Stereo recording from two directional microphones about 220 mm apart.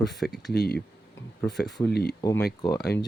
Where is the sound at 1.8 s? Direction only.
45° left (ahead or behind).